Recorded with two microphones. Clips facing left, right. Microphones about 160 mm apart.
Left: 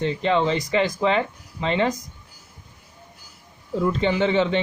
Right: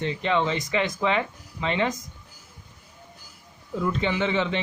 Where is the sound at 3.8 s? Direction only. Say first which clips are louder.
Left 4 dB; 35° left (ahead or behind).